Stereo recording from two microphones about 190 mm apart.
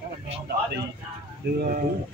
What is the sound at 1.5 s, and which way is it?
Speech, 45° right (ahead or behind).